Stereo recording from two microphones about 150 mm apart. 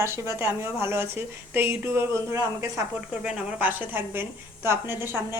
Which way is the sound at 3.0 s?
5° right (ahead or behind).